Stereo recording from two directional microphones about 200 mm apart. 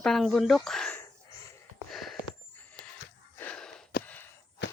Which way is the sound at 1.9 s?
Centre (ahead or behind).